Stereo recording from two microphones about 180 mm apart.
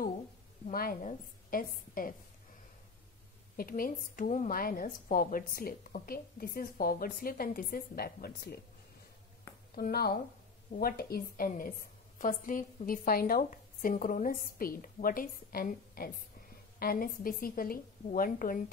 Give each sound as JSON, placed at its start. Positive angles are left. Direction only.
{"t": 0.7, "sound": "a woman's voice", "side_deg": 50}
{"t": 3.5, "sound": "a woman's voice", "side_deg": 55}
{"t": 9.8, "sound": "a woman's voice", "side_deg": 55}